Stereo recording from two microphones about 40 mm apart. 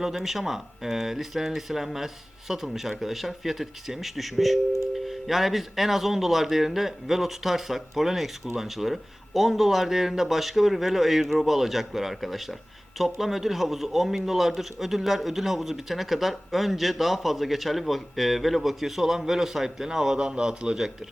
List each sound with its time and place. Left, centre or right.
0.0 s speech: centre
20.3 s a man's voice: right